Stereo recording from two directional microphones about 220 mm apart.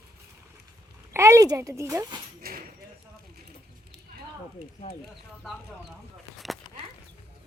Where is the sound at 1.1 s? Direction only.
15° right (ahead or behind).